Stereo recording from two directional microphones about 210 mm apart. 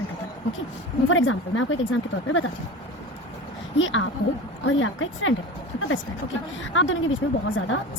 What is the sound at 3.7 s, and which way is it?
Speech, 65° left (ahead or behind).